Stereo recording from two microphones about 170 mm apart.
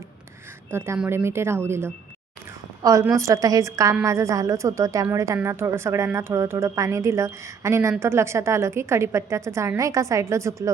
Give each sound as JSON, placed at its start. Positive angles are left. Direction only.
{"t": 0.7, "sound": "a woman's voice", "side_deg": -15}